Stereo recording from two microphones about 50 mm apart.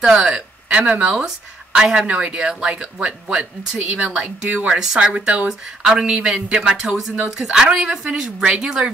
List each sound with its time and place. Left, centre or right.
0.0 s speech: centre
0.7 s speech: right
4.5 s speech: right
4.7 s speech: centre
5.5 s speech: centre